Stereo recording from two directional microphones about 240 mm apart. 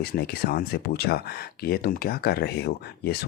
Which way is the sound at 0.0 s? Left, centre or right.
Left.